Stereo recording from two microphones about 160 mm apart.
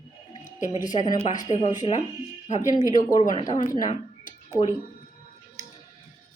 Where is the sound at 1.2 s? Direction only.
55° left (ahead or behind).